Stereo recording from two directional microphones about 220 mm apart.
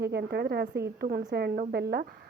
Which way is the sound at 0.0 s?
45° right (ahead or behind).